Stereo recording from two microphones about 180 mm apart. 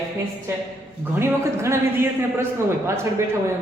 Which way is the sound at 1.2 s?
15° right (ahead or behind).